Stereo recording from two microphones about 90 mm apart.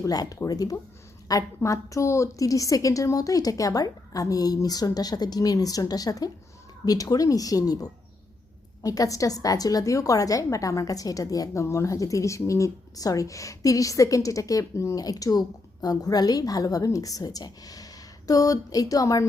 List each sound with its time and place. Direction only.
0.0 s a woman's voice: 45° left (ahead or behind)